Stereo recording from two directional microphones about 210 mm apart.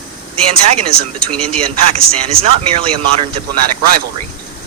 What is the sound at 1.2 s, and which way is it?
Speech, 5° left (ahead or behind).